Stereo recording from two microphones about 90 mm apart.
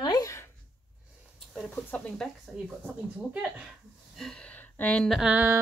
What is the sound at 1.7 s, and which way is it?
Speech, 15° left (ahead or behind).